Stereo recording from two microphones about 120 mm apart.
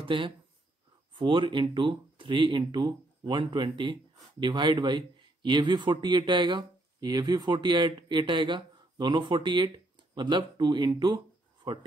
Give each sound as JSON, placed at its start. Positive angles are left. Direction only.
{"t": 0.0, "sound": "speech", "side_deg": -45}